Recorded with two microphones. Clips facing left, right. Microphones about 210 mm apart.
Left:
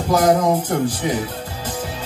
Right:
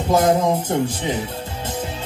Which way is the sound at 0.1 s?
25° right (ahead or behind).